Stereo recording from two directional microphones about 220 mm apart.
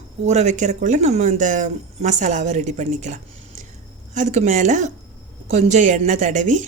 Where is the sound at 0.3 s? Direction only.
30° right (ahead or behind).